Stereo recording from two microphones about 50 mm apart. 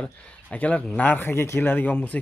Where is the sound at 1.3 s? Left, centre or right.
Left.